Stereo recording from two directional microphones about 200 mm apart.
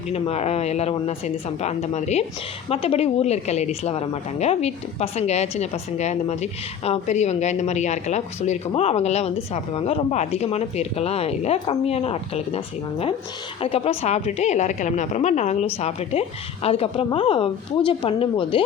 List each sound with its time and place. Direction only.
0.1 s a woman's voice: 30° left (ahead or behind)